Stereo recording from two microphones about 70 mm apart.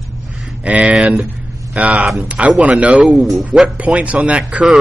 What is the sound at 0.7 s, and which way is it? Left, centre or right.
A man's voice, centre.